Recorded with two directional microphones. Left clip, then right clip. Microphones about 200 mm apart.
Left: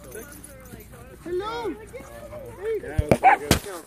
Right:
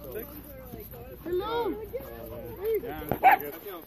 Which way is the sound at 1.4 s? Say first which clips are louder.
Right 1 dB; 45° left (ahead or behind).